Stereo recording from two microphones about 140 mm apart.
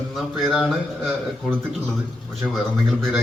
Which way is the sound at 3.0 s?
5° right (ahead or behind).